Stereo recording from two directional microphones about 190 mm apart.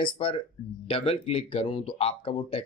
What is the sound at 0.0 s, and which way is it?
Speech, 25° left (ahead or behind).